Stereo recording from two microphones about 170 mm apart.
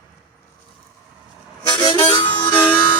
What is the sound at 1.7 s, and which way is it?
Harmonica, 30° left (ahead or behind).